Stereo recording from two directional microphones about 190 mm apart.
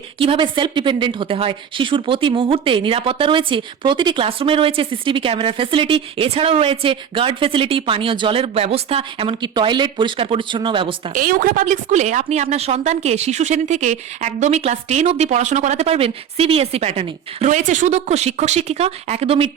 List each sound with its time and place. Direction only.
0.2 s a woman's voice: 25° right (ahead or behind)
11.1 s a woman's voice: 45° right (ahead or behind); by 19.5 s 30° right (ahead or behind)